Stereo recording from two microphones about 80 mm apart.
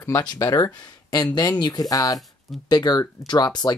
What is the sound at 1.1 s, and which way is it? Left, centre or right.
Speech, left.